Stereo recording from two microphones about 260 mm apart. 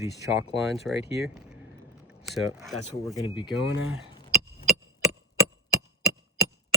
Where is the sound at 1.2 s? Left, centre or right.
Centre.